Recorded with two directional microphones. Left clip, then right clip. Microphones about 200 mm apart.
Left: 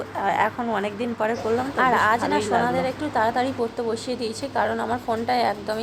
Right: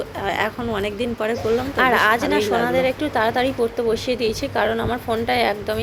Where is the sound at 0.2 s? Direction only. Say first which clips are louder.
Left 1 dB; 20° right (ahead or behind).